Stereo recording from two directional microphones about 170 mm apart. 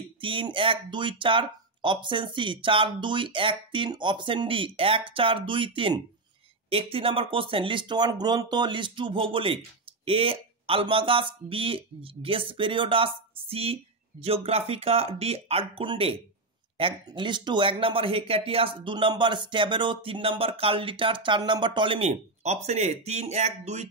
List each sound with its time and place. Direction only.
0.2 s speech: 30° right (ahead or behind)